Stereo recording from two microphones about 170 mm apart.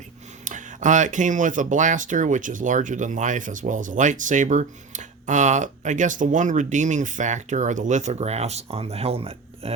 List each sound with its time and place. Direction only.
0.4 s speech: 45° right (ahead or behind)